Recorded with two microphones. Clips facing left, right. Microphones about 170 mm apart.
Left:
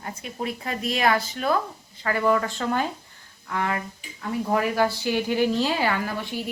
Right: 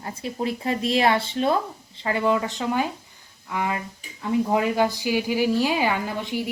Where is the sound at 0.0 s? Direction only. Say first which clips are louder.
Right 4 dB; 30° right (ahead or behind).